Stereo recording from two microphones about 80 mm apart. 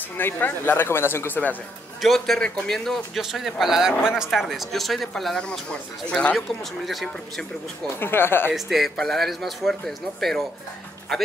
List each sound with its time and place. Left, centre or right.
0.2 s speech: left
2.0 s speech: centre
6.9 s speech: centre
8.0 s speech: left
8.5 s speech: centre